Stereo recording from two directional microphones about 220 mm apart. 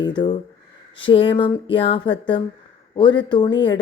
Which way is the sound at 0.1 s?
20° left (ahead or behind).